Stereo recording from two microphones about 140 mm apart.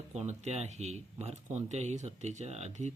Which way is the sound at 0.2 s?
50° right (ahead or behind).